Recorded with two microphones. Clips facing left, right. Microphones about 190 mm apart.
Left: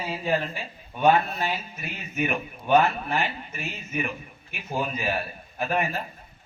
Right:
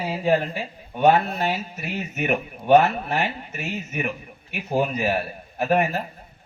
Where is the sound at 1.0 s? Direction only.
70° right (ahead or behind).